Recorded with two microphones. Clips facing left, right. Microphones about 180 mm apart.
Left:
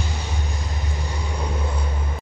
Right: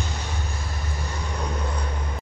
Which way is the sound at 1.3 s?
10° left (ahead or behind).